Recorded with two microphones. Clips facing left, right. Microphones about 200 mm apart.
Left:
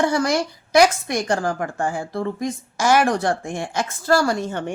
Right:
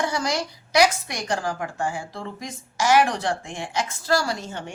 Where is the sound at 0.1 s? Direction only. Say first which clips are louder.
Left 6 dB; 55° left (ahead or behind).